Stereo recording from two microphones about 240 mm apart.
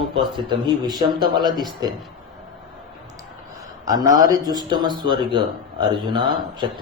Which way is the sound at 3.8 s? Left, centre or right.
Centre.